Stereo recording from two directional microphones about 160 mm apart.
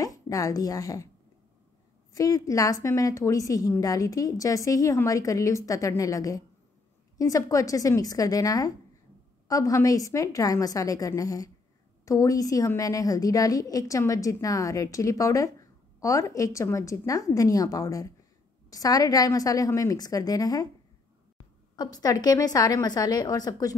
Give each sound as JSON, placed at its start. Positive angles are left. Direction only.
{"t": 0.0, "sound": "a woman's voice", "side_deg": 20}
{"t": 2.1, "sound": "a woman's voice", "side_deg": 20}
{"t": 21.7, "sound": "a woman's voice", "side_deg": 25}